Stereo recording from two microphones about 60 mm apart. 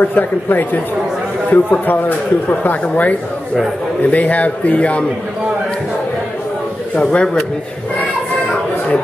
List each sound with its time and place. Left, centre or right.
0.0 s speech: left
7.0 s speech: centre